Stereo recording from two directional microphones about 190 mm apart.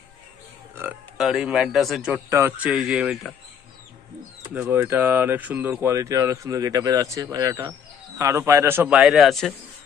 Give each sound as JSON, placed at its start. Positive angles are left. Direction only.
{"t": 0.8, "sound": "speech", "side_deg": -5}
{"t": 4.4, "sound": "speech", "side_deg": -10}